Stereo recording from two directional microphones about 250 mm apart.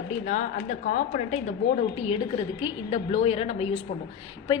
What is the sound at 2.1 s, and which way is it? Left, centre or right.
A woman's voice, left.